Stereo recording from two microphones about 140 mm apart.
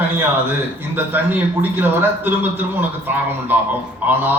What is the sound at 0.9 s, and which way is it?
A man's voice, 15° right (ahead or behind).